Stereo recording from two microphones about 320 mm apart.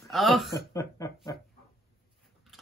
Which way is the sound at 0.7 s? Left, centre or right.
Centre.